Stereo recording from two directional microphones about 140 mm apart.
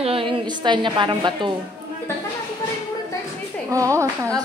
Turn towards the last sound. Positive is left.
turn(degrees=-20)  # may be behind; listen again after turning